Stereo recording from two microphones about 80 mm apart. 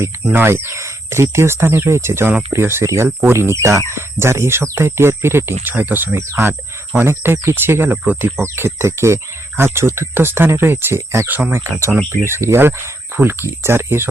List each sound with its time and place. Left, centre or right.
0.3 s speech: right
8.4 s speech: right